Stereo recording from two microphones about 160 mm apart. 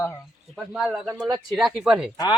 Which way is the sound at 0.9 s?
10° right (ahead or behind).